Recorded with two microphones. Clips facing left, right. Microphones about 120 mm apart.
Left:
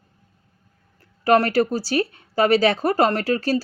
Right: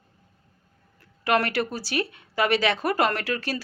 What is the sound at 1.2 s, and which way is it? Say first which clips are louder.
Speech: left 7 dB; 35° left (ahead or behind).